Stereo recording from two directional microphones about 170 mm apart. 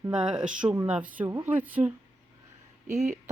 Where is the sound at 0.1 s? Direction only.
5° right (ahead or behind).